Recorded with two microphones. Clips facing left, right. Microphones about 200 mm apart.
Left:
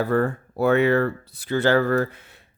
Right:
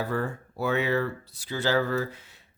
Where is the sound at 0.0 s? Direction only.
55° left (ahead or behind).